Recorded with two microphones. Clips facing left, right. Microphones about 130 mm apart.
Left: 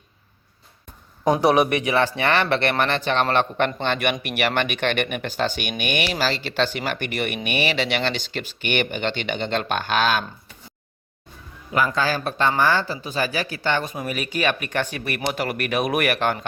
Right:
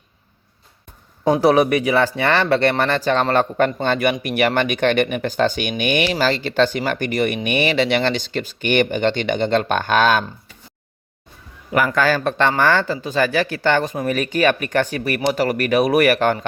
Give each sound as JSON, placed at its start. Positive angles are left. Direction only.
{"t": 1.2, "sound": "speech", "side_deg": -35}
{"t": 11.9, "sound": "speech", "side_deg": -55}